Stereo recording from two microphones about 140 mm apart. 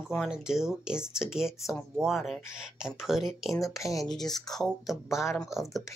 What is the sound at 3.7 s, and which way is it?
Speech, 25° left (ahead or behind).